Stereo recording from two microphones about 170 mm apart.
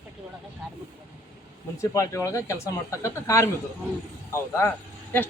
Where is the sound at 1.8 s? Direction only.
15° left (ahead or behind).